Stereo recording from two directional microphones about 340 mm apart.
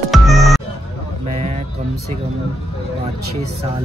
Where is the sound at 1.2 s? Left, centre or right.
Centre.